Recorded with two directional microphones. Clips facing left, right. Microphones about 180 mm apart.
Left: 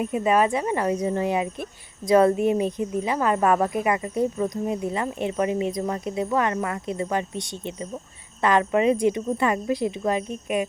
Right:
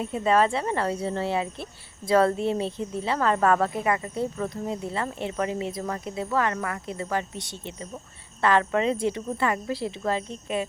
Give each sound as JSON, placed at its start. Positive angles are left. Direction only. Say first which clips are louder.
{"t": 0.0, "sound": "a woman's voice", "louder": "left 1 dB", "side_deg": 15}